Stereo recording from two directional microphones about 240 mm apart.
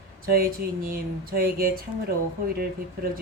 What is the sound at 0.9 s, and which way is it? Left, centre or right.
Speech, right.